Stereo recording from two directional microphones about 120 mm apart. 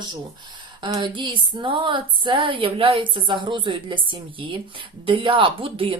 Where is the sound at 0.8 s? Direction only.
40° right (ahead or behind).